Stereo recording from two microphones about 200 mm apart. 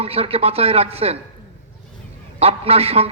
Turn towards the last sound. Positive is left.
turn(degrees=-30)  # may be behind; listen again after turning